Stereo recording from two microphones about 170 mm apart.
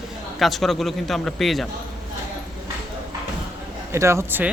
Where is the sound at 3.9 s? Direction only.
15° right (ahead or behind).